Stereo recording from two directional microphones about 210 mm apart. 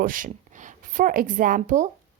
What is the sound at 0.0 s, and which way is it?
Speech, 40° right (ahead or behind).